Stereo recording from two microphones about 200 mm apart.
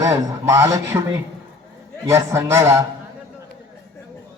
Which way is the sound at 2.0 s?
15° right (ahead or behind).